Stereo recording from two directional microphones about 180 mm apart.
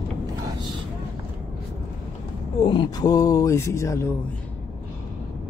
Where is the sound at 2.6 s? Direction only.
25° left (ahead or behind).